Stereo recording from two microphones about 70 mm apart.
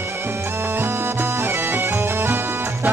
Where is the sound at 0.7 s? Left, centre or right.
Right.